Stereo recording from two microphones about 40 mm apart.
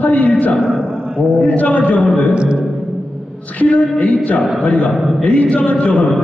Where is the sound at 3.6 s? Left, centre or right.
Left.